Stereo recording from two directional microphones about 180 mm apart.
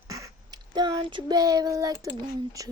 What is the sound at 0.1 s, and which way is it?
Speech, 20° right (ahead or behind).